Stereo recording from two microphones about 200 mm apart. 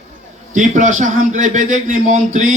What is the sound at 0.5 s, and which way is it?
A man's voice, 40° right (ahead or behind).